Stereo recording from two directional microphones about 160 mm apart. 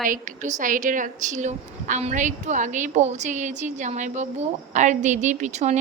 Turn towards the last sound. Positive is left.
turn(degrees=-45)  # may be behind; listen again after turning